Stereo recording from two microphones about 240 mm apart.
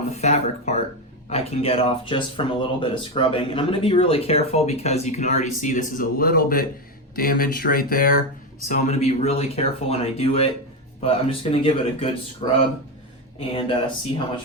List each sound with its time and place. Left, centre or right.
0.1 s speech: left